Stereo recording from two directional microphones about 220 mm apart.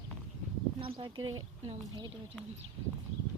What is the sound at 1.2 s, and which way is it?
Speech, 65° right (ahead or behind).